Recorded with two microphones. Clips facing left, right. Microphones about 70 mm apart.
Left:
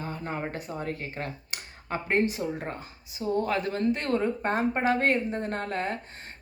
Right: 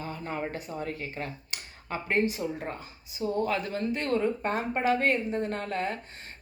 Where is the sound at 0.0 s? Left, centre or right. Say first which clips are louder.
Left 1 dB; left.